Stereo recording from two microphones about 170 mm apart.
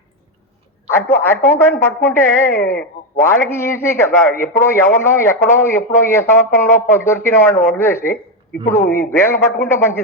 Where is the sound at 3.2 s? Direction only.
15° left (ahead or behind).